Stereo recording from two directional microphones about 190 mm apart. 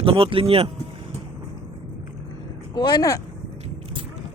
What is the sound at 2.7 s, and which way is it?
Speech, 20° left (ahead or behind).